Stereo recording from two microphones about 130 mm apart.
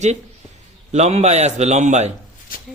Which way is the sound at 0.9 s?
60° right (ahead or behind).